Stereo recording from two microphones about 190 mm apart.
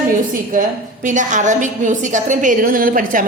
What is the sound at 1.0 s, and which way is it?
A woman's voice, 40° right (ahead or behind).